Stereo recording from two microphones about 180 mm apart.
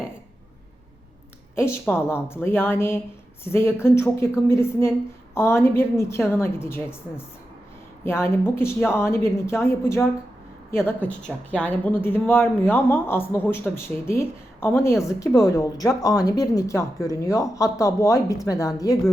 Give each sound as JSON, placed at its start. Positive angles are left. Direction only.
{"t": 1.8, "sound": "a man's voice", "side_deg": 15}
{"t": 8.0, "sound": "a man's voice", "side_deg": 15}